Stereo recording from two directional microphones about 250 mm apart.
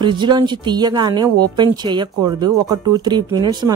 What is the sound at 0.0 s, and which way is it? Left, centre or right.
Speech, centre.